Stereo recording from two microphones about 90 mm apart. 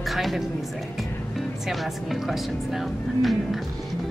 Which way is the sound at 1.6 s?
Centre (ahead or behind).